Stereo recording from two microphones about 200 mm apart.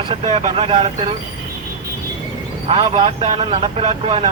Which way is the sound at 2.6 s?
25° right (ahead or behind).